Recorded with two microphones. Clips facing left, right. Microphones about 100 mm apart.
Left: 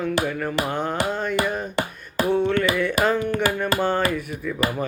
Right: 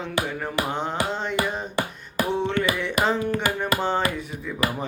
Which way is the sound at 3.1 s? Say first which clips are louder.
Left 1 dB; 70° left (ahead or behind).